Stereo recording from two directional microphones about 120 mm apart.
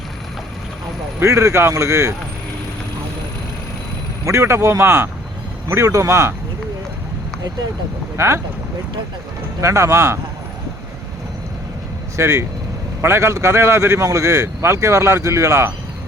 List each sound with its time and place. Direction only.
1.2 s a man's voice: 25° right (ahead or behind)
4.3 s a man's voice: 25° right (ahead or behind)
8.1 s speech: 25° right (ahead or behind)
9.6 s a man's voice: 25° right (ahead or behind)
12.1 s a man's voice: 25° right (ahead or behind)